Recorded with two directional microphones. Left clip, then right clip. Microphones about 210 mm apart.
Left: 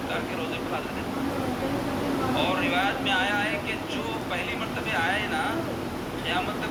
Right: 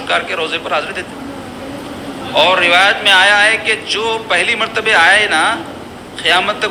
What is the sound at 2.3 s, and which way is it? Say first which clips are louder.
Speech: right 18 dB; 45° right (ahead or behind).